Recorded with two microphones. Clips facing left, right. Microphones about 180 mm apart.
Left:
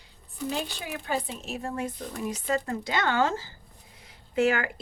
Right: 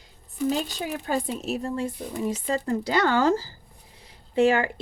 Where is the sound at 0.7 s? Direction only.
40° right (ahead or behind).